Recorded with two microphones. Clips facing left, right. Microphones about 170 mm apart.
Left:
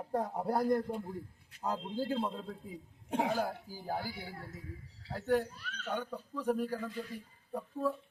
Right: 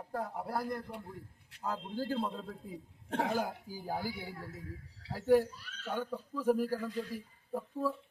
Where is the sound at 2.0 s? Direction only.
5° left (ahead or behind).